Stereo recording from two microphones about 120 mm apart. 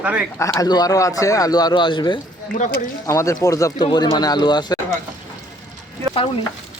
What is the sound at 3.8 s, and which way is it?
Speech, 35° left (ahead or behind).